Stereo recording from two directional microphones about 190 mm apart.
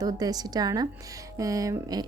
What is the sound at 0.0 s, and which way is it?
Speech, 20° right (ahead or behind).